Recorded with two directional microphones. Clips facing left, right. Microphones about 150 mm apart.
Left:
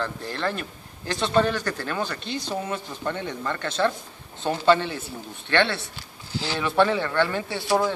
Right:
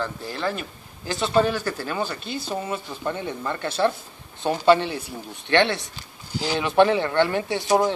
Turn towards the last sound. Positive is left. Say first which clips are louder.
# right 3 dB
turn(degrees=-20)  # may be behind; listen again after turning